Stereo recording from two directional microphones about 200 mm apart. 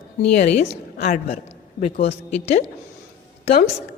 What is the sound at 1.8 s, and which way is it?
Speech, 30° left (ahead or behind).